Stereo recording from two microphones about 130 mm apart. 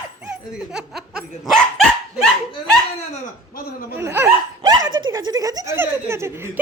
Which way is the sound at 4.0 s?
20° right (ahead or behind).